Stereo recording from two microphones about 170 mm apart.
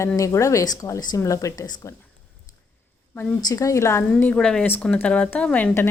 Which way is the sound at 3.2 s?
20° left (ahead or behind).